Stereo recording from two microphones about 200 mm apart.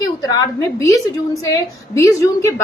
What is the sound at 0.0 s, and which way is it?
A woman's voice, 15° left (ahead or behind).